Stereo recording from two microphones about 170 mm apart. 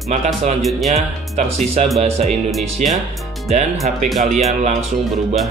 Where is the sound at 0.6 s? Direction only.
Centre (ahead or behind).